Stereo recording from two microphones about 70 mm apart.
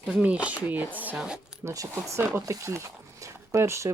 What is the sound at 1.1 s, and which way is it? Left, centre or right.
Speech, centre.